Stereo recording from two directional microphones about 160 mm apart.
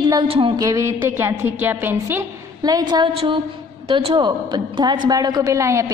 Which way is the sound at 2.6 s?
25° right (ahead or behind).